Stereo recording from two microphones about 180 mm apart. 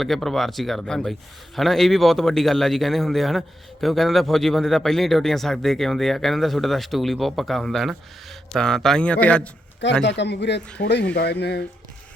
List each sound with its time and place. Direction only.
0.0 s a man's voice: centre (ahead or behind)
9.8 s speech: 75° left (ahead or behind)